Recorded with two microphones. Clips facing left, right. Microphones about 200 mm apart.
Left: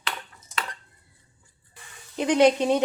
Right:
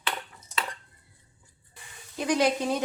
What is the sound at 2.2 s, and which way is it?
Speech, 25° left (ahead or behind).